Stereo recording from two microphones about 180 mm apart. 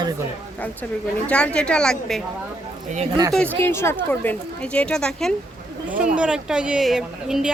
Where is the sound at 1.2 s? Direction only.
5° left (ahead or behind).